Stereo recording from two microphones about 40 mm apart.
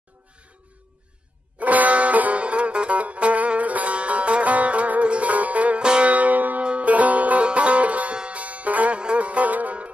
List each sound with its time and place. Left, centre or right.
1.6 s music: right
6.6 s music: right
6.9 s music: right